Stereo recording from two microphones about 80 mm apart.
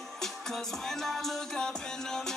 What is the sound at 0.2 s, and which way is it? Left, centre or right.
Music, centre.